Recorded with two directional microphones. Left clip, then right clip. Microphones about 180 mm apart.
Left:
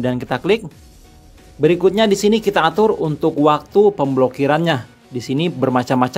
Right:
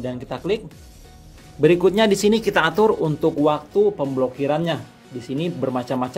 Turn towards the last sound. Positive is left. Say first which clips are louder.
# left 7 dB
turn(degrees=35)  # may be behind; listen again after turning